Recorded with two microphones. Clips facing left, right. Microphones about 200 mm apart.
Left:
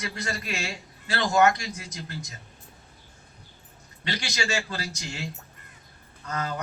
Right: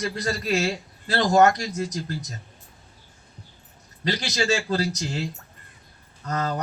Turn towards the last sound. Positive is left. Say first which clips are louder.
# right 4 dB
turn(degrees=-40)  # may be behind; listen again after turning